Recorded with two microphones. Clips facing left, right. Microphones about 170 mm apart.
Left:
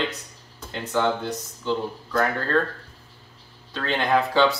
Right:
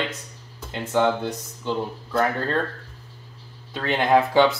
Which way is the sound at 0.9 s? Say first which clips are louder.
Right 3 dB; 15° right (ahead or behind).